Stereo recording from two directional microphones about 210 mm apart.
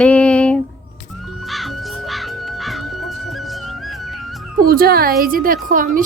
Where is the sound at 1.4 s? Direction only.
Centre (ahead or behind).